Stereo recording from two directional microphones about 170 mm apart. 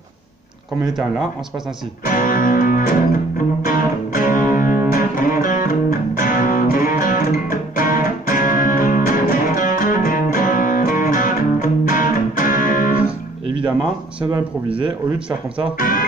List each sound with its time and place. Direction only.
0.8 s speech: 5° right (ahead or behind)
2.0 s music: 55° left (ahead or behind)
15.1 s speech: 5° right (ahead or behind)
15.8 s speech: 55° left (ahead or behind)